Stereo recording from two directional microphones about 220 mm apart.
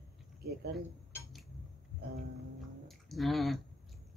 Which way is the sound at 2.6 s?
Centre (ahead or behind).